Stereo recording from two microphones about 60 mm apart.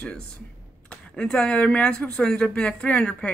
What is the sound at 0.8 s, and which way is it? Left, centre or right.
Speech, centre.